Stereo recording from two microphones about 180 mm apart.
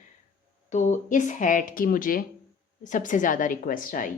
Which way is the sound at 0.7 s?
40° left (ahead or behind).